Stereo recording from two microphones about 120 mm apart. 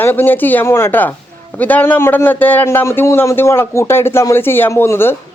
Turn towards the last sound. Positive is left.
turn(degrees=20)  # may be behind; listen again after turning